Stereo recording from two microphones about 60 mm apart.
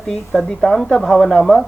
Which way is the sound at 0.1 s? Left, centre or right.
Centre.